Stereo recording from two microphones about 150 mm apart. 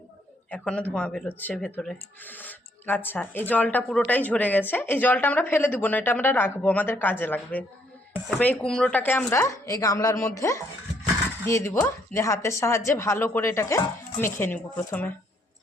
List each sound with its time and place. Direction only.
0.5 s speech: 10° left (ahead or behind)
8.4 s speech: 5° left (ahead or behind)